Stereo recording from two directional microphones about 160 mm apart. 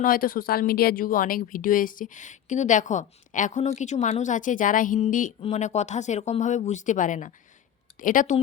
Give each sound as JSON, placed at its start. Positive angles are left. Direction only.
{"t": 0.0, "sound": "speech", "side_deg": 60}